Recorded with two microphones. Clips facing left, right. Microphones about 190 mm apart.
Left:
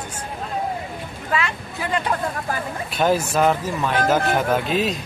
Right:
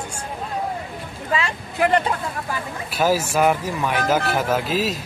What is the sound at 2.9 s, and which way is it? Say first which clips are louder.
Speech: even; 5° right (ahead or behind).